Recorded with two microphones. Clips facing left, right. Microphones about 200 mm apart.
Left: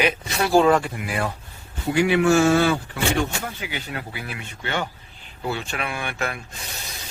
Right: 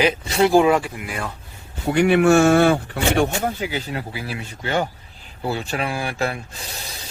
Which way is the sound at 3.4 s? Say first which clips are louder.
Right 7 dB; 35° right (ahead or behind).